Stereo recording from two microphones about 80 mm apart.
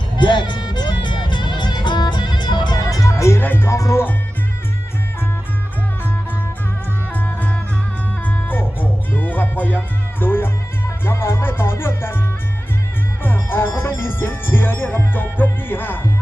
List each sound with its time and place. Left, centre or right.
0.2 s music: left
3.1 s music: left
3.4 s music: left
3.7 s speech: left
7.1 s music: left
13.2 s speech: left